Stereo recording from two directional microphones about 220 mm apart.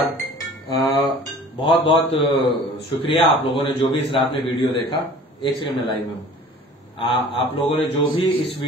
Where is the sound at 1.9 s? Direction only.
25° left (ahead or behind).